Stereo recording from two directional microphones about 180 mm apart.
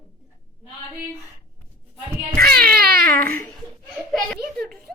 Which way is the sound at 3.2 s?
10° left (ahead or behind).